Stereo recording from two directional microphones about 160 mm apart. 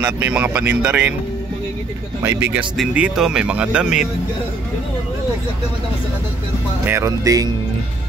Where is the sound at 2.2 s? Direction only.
15° right (ahead or behind).